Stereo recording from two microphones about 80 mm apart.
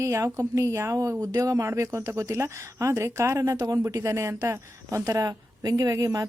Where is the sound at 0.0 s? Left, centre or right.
Right.